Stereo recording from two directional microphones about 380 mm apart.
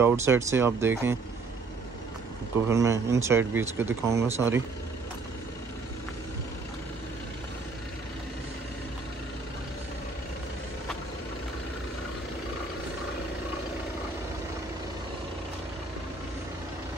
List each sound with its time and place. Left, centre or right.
0.0 s speech: centre
2.7 s speech: centre